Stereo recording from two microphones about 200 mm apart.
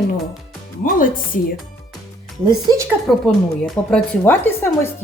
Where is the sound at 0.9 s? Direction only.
45° left (ahead or behind).